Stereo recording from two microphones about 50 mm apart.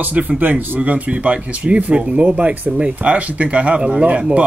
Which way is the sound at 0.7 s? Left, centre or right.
Right.